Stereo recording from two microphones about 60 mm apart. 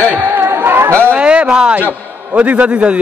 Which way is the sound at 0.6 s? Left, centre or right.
Right.